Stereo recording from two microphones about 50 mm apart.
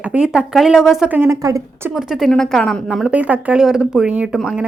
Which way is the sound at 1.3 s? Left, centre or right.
Right.